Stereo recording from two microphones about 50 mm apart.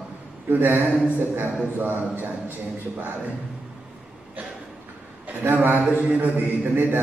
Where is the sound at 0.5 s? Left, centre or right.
Right.